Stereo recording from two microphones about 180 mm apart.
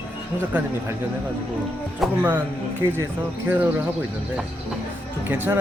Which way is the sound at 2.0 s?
Centre (ahead or behind).